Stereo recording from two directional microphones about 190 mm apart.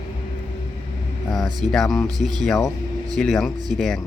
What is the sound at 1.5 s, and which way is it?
Speech, 20° right (ahead or behind).